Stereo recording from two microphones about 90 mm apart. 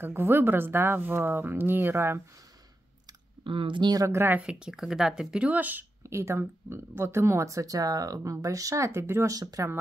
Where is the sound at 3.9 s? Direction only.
35° right (ahead or behind).